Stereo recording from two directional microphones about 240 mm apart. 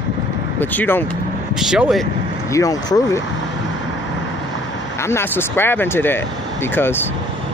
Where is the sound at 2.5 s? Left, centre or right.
Centre.